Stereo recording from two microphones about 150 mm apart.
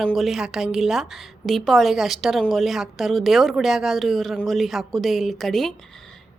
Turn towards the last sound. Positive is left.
turn(degrees=0)  # may be behind; listen again after turning